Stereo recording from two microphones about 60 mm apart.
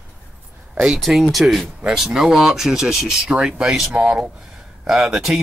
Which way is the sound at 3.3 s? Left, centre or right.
Centre.